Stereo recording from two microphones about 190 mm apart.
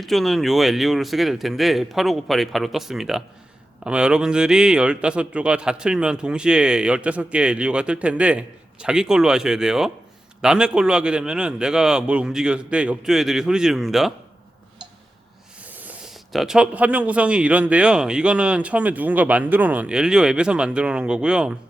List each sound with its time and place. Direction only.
0.0 s a man's voice: centre (ahead or behind)
15.6 s a man's voice: 10° right (ahead or behind)